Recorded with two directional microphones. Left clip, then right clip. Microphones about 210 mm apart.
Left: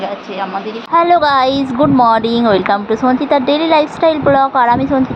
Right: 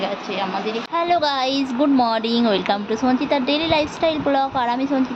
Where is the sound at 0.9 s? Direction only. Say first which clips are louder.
Left 10 dB; 20° left (ahead or behind).